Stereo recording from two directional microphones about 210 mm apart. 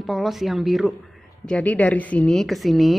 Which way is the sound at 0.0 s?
Centre (ahead or behind).